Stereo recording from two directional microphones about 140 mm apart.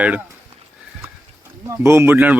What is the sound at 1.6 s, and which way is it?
Speech, 20° right (ahead or behind).